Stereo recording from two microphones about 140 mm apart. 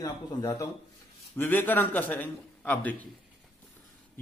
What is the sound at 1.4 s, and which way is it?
A man's voice, 15° left (ahead or behind).